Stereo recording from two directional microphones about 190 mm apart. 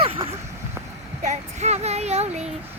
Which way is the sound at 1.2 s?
40° right (ahead or behind).